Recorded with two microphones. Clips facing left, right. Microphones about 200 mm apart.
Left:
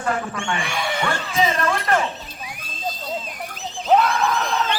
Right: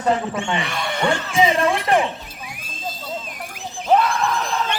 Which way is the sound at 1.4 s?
15° right (ahead or behind).